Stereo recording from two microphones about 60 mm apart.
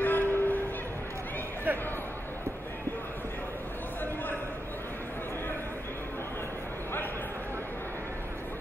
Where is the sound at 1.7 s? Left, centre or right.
Right.